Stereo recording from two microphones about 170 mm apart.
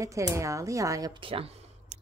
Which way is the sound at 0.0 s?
20° right (ahead or behind).